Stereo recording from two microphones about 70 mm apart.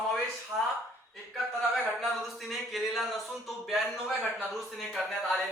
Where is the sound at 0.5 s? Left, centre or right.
Right.